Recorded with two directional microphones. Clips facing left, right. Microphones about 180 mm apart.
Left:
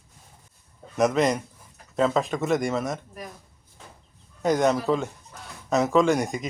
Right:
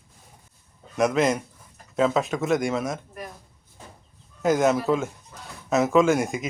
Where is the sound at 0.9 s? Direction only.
Centre (ahead or behind).